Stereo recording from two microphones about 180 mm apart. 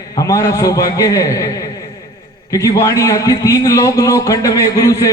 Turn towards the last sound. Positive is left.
turn(degrees=20)  # may be behind; listen again after turning